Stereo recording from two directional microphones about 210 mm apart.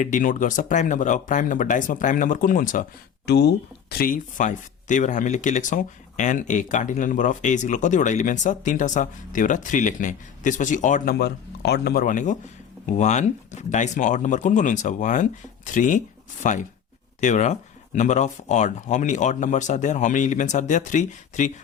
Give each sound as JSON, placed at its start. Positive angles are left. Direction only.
{"t": 0.0, "sound": "speech", "side_deg": 40}
{"t": 3.2, "sound": "speech", "side_deg": 50}